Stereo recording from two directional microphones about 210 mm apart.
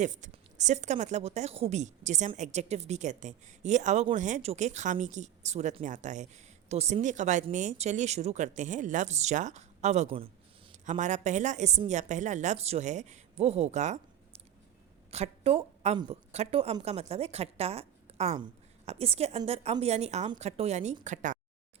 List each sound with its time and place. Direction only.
0.0 s a woman's voice: 35° right (ahead or behind)